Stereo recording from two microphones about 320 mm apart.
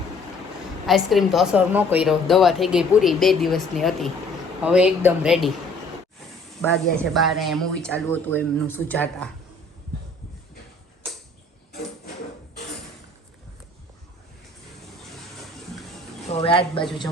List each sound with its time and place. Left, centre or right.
0.9 s a woman's voice: centre
6.6 s a woman's voice: centre
16.3 s a woman's voice: centre